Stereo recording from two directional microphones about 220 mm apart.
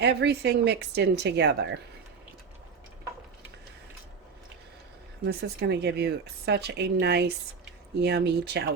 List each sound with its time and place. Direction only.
0.0 s speech: 50° right (ahead or behind)
5.2 s speech: 50° right (ahead or behind)